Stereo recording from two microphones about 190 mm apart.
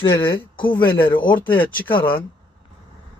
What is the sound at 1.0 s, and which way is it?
Speech, 25° left (ahead or behind).